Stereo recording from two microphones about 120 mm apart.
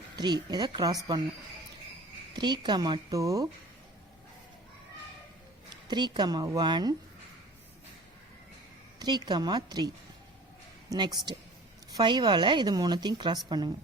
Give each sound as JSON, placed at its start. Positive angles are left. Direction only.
{"t": 0.2, "sound": "speech", "side_deg": -35}
{"t": 2.3, "sound": "speech", "side_deg": -40}
{"t": 5.9, "sound": "speech", "side_deg": -40}
{"t": 9.0, "sound": "speech", "side_deg": -35}